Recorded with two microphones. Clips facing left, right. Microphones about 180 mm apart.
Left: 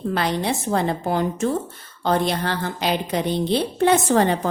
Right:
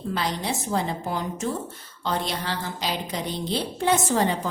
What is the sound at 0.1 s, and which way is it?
A woman's voice, 60° left (ahead or behind).